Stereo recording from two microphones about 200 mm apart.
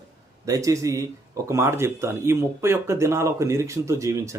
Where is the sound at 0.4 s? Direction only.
15° right (ahead or behind).